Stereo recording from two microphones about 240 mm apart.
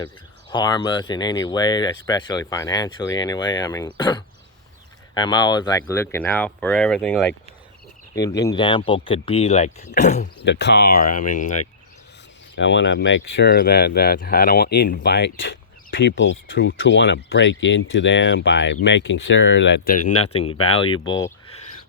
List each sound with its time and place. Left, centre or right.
0.5 s speech: centre
10.4 s speech: left
12.5 s speech: left
20.1 s speech: left
20.9 s speech: centre